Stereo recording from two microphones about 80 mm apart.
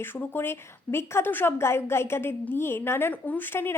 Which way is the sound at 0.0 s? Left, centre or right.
Left.